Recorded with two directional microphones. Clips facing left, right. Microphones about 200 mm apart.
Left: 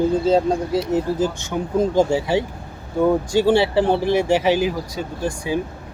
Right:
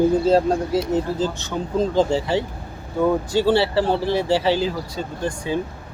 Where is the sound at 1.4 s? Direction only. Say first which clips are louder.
Left 2 dB; 10° left (ahead or behind).